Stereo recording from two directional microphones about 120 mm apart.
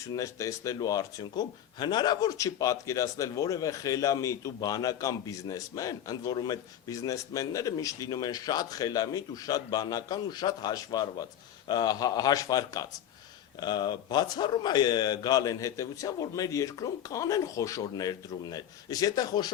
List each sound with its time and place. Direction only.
0.1 s a man's voice: 30° left (ahead or behind)